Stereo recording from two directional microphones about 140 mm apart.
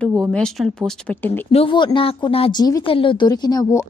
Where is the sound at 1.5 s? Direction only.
40° left (ahead or behind).